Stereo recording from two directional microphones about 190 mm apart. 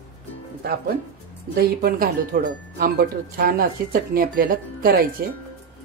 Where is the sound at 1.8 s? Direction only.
50° right (ahead or behind).